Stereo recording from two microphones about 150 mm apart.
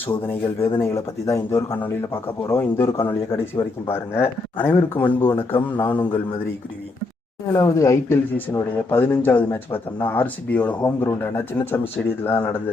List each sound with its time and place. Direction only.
0.1 s speech: 15° left (ahead or behind)
5.9 s a man's voice: 30° left (ahead or behind)
7.5 s speech: 20° left (ahead or behind)